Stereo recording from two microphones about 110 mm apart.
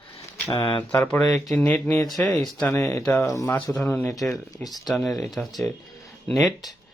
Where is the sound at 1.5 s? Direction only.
15° left (ahead or behind).